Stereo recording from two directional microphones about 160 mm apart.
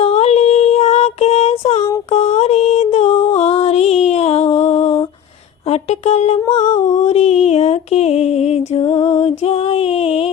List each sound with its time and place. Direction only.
0.0 s a sound: 40° left (ahead or behind)
2.0 s music: 40° left (ahead or behind)
5.6 s speech: 40° left (ahead or behind)
6.5 s music: 35° left (ahead or behind)